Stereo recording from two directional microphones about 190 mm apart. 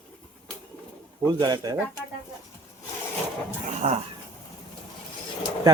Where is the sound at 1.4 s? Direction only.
20° right (ahead or behind).